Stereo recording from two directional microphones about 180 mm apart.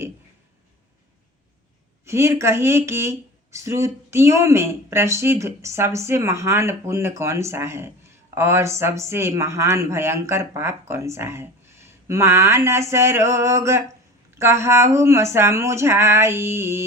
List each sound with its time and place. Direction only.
2.0 s speech: 15° right (ahead or behind)